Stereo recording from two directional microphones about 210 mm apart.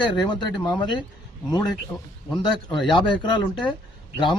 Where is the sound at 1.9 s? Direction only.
5° left (ahead or behind).